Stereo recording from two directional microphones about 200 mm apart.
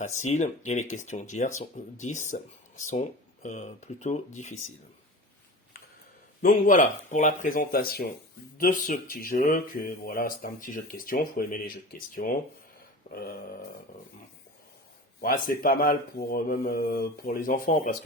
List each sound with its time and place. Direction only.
0.0 s speech: 35° left (ahead or behind)
6.4 s speech: 40° left (ahead or behind)
15.2 s speech: 45° left (ahead or behind)